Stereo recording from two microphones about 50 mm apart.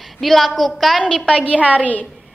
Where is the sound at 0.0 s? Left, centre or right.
Centre.